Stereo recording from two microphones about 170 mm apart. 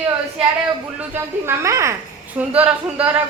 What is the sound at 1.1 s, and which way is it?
A woman's voice, 15° right (ahead or behind).